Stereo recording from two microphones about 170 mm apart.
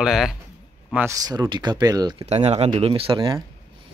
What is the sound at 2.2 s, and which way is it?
Speech, 40° right (ahead or behind).